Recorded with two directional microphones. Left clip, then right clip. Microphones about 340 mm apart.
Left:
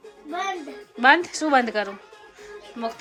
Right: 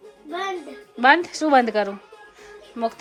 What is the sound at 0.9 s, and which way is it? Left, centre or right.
A woman's voice, centre.